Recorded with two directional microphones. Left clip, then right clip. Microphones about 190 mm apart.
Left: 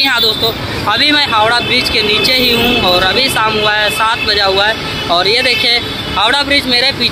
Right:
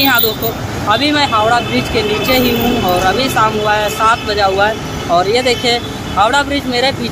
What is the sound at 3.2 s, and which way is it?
Speech, 10° right (ahead or behind).